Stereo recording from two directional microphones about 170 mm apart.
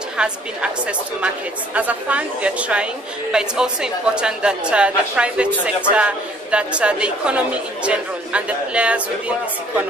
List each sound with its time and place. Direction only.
0.2 s a woman's voice: 5° right (ahead or behind)